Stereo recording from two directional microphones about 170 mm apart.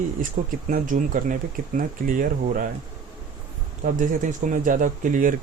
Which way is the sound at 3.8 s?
50° right (ahead or behind).